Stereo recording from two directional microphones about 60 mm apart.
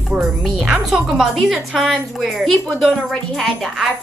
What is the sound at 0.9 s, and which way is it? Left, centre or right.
A child's voice, centre.